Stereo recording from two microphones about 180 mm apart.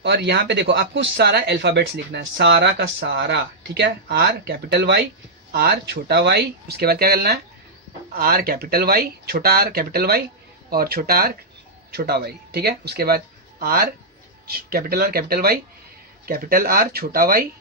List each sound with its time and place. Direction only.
0.0 s speech: 65° right (ahead or behind)